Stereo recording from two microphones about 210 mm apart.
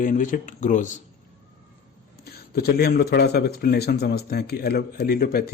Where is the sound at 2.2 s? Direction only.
50° left (ahead or behind).